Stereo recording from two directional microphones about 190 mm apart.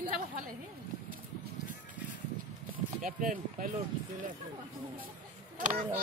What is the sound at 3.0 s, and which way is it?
Speech, 45° right (ahead or behind).